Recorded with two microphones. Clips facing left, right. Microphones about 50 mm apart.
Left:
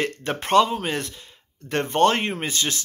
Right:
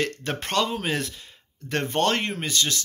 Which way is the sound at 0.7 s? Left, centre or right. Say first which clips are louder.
Even; centre.